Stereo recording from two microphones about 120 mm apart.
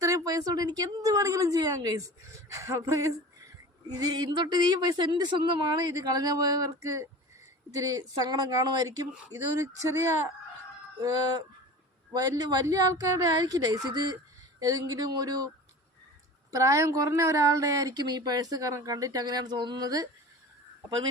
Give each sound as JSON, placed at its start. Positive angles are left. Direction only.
{"t": 0.0, "sound": "a woman's voice", "side_deg": -30}
{"t": 11.0, "sound": "a woman's voice", "side_deg": -30}
{"t": 16.5, "sound": "speech", "side_deg": -25}